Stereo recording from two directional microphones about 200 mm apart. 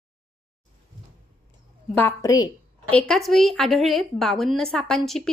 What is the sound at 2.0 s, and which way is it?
Speech, 15° left (ahead or behind).